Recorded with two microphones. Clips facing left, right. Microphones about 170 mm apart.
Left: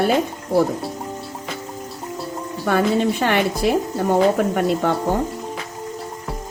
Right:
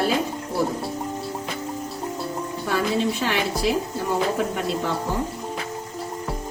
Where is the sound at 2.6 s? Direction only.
55° left (ahead or behind).